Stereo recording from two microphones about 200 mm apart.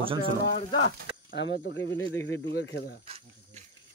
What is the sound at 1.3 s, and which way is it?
Speech, 60° left (ahead or behind).